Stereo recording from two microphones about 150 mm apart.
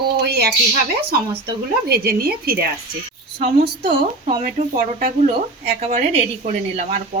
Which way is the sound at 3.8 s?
40° right (ahead or behind).